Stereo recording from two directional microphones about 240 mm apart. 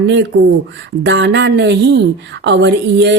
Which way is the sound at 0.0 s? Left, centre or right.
Right.